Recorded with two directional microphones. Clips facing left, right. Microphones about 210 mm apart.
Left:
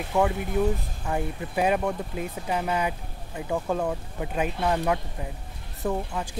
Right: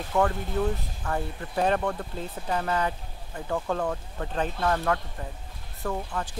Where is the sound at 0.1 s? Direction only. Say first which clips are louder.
Left 1 dB; 10° left (ahead or behind).